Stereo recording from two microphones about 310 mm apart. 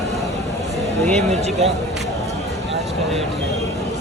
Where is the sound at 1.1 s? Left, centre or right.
Right.